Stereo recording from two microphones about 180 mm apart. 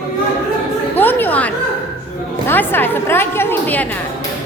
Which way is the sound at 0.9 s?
10° left (ahead or behind).